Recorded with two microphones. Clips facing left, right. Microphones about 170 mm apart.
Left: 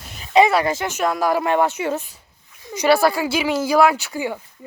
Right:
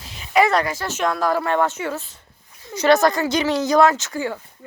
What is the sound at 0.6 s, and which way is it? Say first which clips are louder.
Speech: left 3 dB; 20° left (ahead or behind).